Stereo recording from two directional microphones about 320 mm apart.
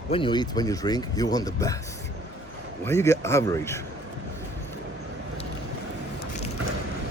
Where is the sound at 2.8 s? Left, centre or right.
Centre.